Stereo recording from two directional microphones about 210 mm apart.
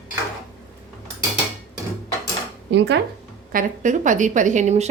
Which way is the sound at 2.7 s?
55° right (ahead or behind).